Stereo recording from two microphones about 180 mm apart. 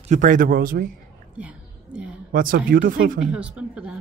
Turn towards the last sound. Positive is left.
turn(degrees=-5)  # may be behind; listen again after turning